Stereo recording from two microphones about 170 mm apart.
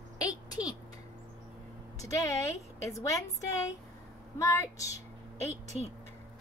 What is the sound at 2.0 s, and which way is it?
A woman's voice, 20° left (ahead or behind).